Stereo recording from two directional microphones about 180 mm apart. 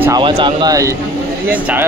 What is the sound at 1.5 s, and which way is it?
Speech, 10° right (ahead or behind).